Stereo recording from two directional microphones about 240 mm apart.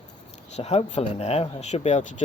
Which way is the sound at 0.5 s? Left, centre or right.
Left.